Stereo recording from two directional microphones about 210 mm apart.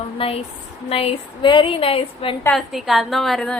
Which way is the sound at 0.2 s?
25° left (ahead or behind).